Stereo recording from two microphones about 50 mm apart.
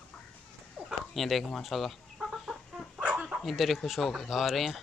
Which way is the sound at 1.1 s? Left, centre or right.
Centre.